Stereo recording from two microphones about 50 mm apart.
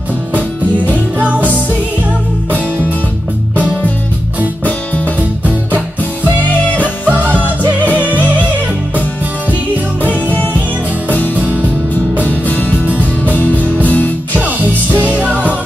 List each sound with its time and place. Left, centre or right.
0.3 s music: right
4.6 s music: left
7.1 s music: right
10.0 s music: left
11.3 s music: right
12.2 s music: left
14.3 s music: right